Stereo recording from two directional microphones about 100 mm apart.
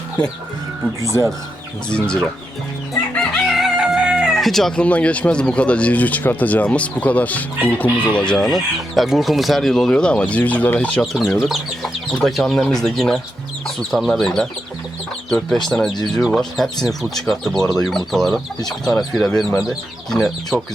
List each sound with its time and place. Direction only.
1.9 s speech: 10° left (ahead or behind)
3.2 s speech: centre (ahead or behind)
11.0 s speech: centre (ahead or behind)